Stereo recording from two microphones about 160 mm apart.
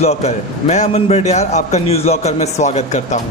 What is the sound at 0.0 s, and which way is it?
A man's voice, 40° left (ahead or behind).